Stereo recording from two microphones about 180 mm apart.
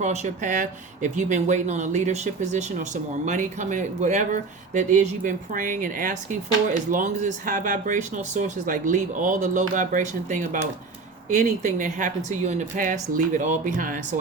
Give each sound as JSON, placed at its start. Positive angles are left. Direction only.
{"t": 0.0, "sound": "speech", "side_deg": -40}